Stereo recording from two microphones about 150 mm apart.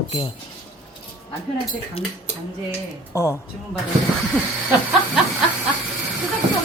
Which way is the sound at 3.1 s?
20° left (ahead or behind).